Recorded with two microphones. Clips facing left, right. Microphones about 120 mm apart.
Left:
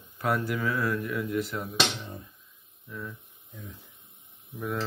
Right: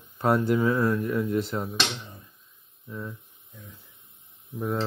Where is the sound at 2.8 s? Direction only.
25° right (ahead or behind).